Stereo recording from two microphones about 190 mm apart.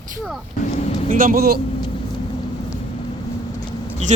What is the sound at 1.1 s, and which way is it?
Speech, 45° right (ahead or behind).